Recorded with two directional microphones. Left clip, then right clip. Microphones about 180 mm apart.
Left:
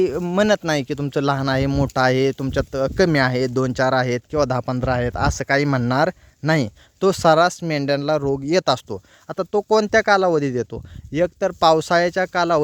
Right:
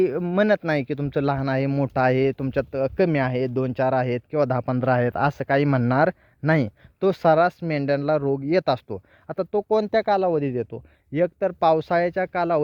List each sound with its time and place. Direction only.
0.0 s speech: 25° left (ahead or behind)
7.0 s speech: 30° left (ahead or behind)